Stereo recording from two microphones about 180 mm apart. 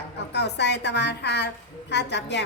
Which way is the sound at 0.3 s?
70° left (ahead or behind).